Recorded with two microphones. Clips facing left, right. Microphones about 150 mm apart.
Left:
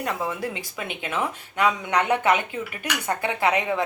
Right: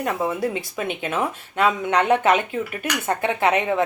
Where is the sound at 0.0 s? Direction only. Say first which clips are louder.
Right 4 dB; 20° right (ahead or behind).